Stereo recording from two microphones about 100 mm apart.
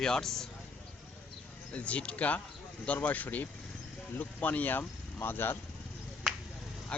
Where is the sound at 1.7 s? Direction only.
15° left (ahead or behind).